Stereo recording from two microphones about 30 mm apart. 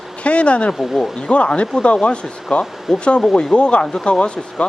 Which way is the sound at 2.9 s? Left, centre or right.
Centre.